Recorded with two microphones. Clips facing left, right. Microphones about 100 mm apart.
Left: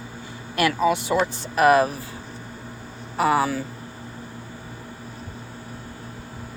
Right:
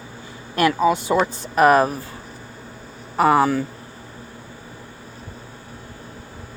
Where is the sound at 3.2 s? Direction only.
45° right (ahead or behind).